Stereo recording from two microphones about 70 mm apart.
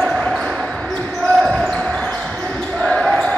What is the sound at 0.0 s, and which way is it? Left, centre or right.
Basketball bounce, centre.